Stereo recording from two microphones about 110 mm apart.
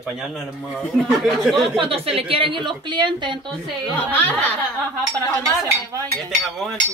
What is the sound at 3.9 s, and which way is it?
Speech, 15° left (ahead or behind).